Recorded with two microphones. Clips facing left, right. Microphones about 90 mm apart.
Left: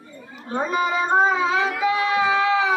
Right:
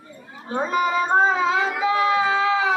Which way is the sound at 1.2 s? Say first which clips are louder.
Even; 30° right (ahead or behind).